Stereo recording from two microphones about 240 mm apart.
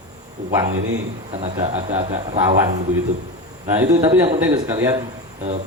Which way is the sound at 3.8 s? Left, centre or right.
Centre.